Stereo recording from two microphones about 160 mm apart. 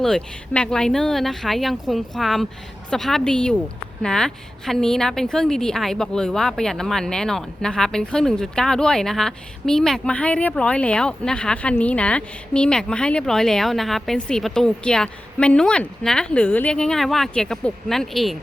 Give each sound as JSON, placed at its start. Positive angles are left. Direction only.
{"t": 0.0, "sound": "a woman's voice", "side_deg": 5}